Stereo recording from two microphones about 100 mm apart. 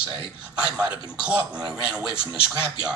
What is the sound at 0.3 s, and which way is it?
Speech, 15° right (ahead or behind).